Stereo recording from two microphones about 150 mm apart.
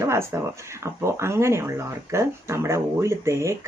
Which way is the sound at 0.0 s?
20° right (ahead or behind).